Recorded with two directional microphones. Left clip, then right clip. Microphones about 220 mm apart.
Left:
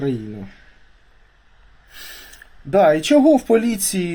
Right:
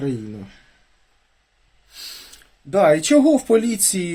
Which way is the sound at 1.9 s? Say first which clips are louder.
Right 2 dB; 10° right (ahead or behind).